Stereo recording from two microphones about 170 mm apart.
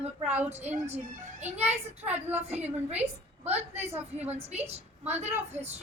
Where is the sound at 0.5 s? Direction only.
40° right (ahead or behind).